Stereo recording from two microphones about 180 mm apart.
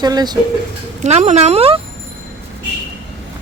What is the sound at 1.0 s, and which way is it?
Speech, 40° right (ahead or behind).